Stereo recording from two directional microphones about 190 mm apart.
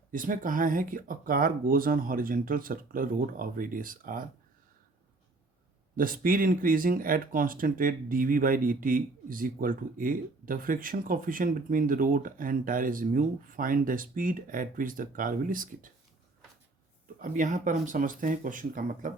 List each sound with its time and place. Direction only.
0.1 s speech: 45° right (ahead or behind)
6.0 s speech: 50° right (ahead or behind)
17.2 s speech: 45° right (ahead or behind)